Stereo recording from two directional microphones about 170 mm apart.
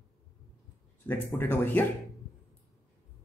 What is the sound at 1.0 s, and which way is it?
Speech, 10° left (ahead or behind).